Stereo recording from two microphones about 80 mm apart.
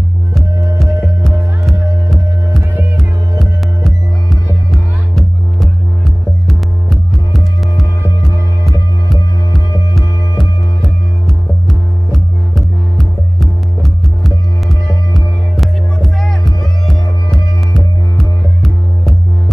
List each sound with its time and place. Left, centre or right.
0.3 s music: centre